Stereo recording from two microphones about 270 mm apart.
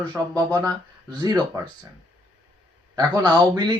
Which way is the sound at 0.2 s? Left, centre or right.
Centre.